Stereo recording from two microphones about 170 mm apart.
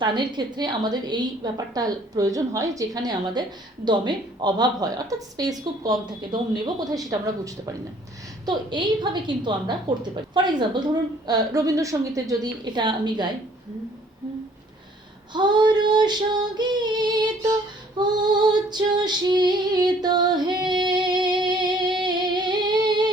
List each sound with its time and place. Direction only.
0.0 s a woman's voice: 25° right (ahead or behind)
15.3 s a woman's voice: 25° right (ahead or behind)
17.9 s female singing: 25° right (ahead or behind)